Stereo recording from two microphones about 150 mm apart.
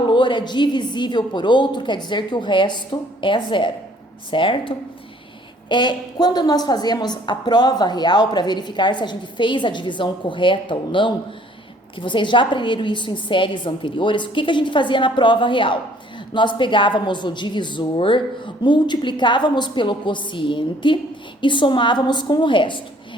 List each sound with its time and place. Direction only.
0.0 s a woman's voice: 30° left (ahead or behind)